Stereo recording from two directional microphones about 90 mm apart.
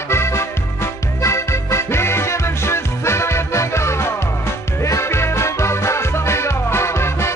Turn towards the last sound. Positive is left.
turn(degrees=30)  # may be behind; listen again after turning